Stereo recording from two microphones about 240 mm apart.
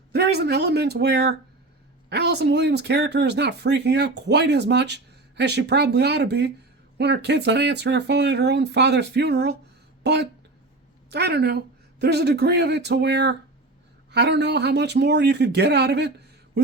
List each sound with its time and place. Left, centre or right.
0.1 s speech: right